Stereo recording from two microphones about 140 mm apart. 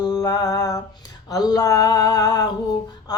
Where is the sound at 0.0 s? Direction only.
30° left (ahead or behind).